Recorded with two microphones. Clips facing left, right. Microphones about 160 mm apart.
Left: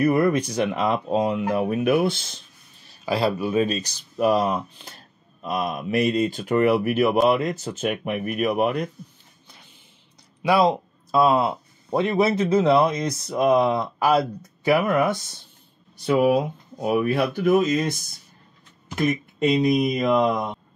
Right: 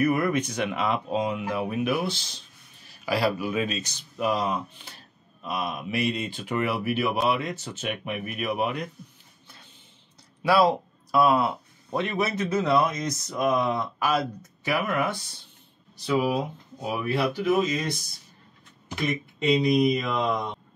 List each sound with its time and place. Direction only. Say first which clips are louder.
0.0 s speech: left 4 dB; 30° left (ahead or behind); by 2.2 s 55° left (ahead or behind)
3.1 s speech: left 3 dB; 25° left (ahead or behind); by 8.8 s 45° left (ahead or behind)
10.4 s speech: left 2 dB; 20° left (ahead or behind); by 15.0 s 35° left (ahead or behind)
16.1 s speech: left 6 dB; 55° left (ahead or behind)
18.9 s speech: left 6 dB; 50° left (ahead or behind)